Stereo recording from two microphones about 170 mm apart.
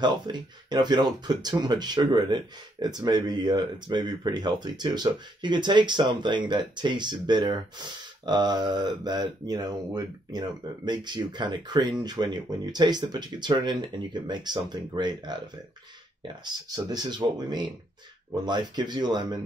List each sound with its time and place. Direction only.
0.0 s speech: 25° right (ahead or behind)
18.3 s speech: 25° right (ahead or behind)